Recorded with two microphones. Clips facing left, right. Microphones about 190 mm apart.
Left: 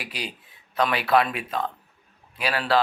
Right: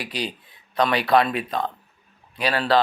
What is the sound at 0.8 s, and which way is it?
Speech, 5° left (ahead or behind).